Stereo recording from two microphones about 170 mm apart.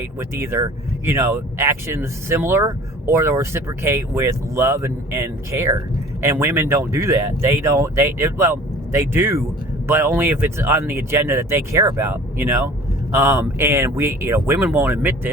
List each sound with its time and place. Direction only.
0.2 s speech: 15° right (ahead or behind)